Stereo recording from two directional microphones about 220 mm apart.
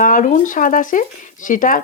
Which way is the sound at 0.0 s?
35° left (ahead or behind).